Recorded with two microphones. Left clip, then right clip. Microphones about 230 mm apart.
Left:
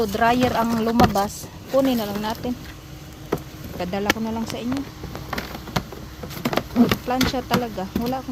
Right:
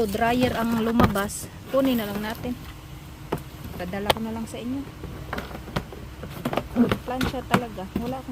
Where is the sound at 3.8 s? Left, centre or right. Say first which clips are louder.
Left 2 dB; centre.